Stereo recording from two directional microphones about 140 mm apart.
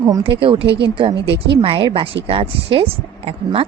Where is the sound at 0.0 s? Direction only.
35° right (ahead or behind).